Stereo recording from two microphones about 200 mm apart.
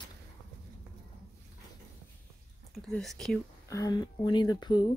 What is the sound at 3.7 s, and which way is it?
Speech, 20° left (ahead or behind).